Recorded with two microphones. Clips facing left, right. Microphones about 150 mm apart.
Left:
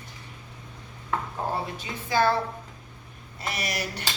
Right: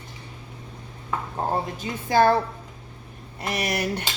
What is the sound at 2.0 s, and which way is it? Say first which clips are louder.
Chopping: right 5 dB; 50° right (ahead or behind).